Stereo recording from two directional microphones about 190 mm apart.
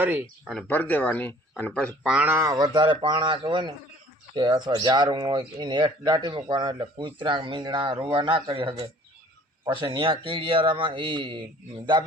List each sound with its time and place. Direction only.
0.0 s speech: 10° right (ahead or behind)
0.5 s speech: 10° left (ahead or behind)
2.0 s speech: 10° right (ahead or behind); by 11.4 s 25° right (ahead or behind)